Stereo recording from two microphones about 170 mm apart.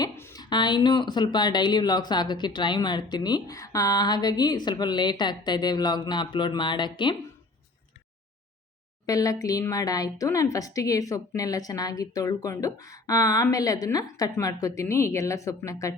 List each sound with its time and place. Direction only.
0.0 s a sound: 20° left (ahead or behind)
0.5 s a woman's voice: 25° left (ahead or behind)
9.0 s a woman's voice: 20° left (ahead or behind)